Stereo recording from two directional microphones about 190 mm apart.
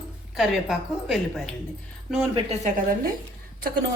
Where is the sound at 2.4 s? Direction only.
35° right (ahead or behind).